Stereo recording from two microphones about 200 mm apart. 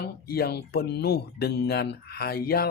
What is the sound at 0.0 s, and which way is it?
Speech, 50° left (ahead or behind).